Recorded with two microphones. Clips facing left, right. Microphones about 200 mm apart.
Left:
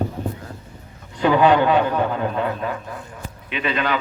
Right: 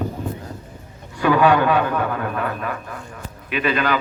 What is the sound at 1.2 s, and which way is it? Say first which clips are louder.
A man's voice: left 1 dB; 20° left (ahead or behind).